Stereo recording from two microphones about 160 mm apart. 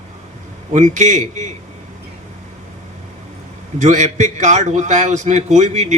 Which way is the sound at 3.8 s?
50° right (ahead or behind).